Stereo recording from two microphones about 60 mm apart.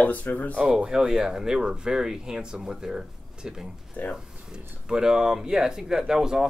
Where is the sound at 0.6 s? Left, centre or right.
Centre.